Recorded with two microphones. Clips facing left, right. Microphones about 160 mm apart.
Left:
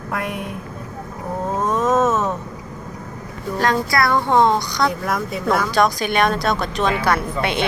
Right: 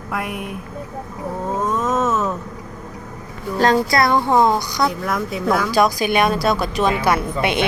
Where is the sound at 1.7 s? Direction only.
20° left (ahead or behind).